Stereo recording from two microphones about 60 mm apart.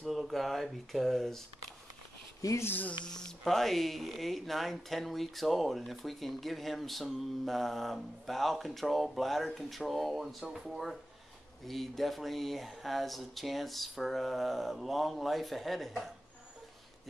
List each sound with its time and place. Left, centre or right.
0.0 s speech: centre
2.6 s speech: left
3.1 s speech: centre